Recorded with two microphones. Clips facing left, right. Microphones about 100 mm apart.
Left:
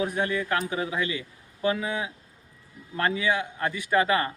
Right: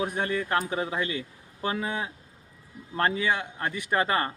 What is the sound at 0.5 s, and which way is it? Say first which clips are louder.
Speech: even; 35° right (ahead or behind).